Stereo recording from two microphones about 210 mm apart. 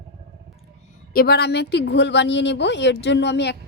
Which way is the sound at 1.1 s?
45° left (ahead or behind).